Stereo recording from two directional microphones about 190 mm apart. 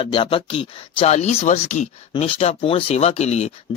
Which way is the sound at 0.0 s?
25° left (ahead or behind).